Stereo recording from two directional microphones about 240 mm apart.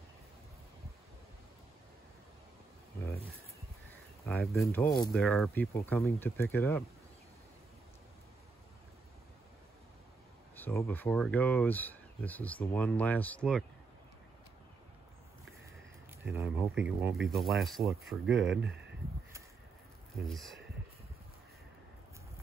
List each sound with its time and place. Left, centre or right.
3.9 s a sound: centre
5.1 s speech: centre
10.5 s speech: centre
16.3 s speech: centre
18.3 s speech: right
20.2 s speech: centre